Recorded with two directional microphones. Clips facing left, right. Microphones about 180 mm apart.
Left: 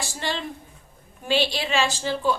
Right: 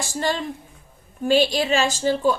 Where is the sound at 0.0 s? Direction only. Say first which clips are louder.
Right 5 dB; 45° right (ahead or behind).